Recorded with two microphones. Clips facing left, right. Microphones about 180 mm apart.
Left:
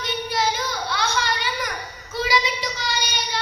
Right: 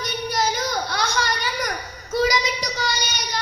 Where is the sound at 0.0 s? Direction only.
40° right (ahead or behind).